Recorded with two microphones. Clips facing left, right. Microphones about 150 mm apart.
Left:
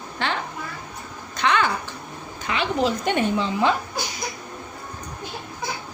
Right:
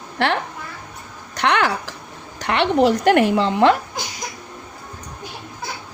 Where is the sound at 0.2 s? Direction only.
85° right.